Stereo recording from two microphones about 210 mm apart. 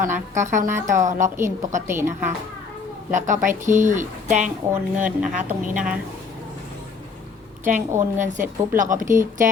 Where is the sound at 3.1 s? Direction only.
35° right (ahead or behind).